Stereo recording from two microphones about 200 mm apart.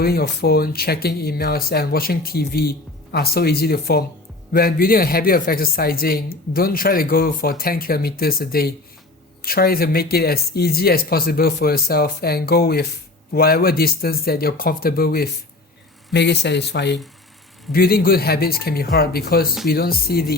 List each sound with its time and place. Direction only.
0.0 s speech: 50° left (ahead or behind)